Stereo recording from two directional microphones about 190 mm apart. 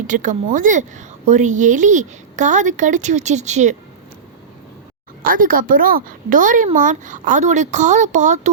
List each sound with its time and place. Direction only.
0.1 s a woman's voice: 40° right (ahead or behind)
5.2 s a woman's voice: 50° right (ahead or behind)